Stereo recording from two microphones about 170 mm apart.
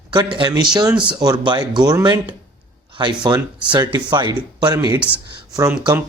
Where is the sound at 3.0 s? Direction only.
25° right (ahead or behind).